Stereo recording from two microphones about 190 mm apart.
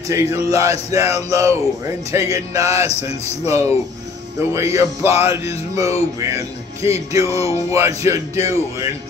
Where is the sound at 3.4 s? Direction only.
15° right (ahead or behind).